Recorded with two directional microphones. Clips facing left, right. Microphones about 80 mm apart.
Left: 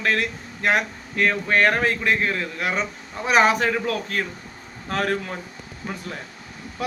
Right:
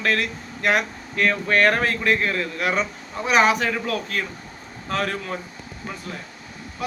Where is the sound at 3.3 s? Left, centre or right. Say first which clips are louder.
Left 1 dB; left.